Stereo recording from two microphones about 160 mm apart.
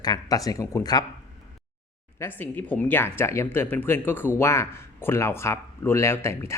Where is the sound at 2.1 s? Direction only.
15° left (ahead or behind).